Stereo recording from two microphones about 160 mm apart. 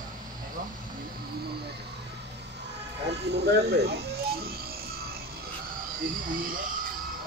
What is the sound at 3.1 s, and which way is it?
Cricket, 90° right.